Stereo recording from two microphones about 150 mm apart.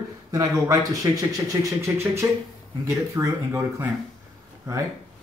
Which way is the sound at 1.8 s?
15° right (ahead or behind).